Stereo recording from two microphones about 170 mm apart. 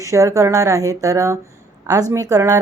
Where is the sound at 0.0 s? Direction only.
20° right (ahead or behind).